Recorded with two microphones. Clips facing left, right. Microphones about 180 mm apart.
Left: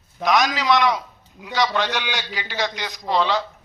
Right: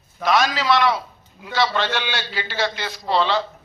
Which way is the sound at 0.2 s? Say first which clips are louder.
Even; 15° left (ahead or behind).